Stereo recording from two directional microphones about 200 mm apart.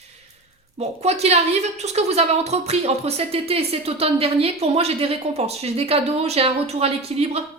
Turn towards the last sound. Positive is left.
turn(degrees=-30)  # may be behind; listen again after turning